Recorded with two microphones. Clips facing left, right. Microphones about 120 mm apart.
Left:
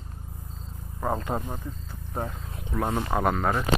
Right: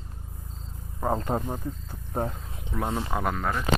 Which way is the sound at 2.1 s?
20° right (ahead or behind).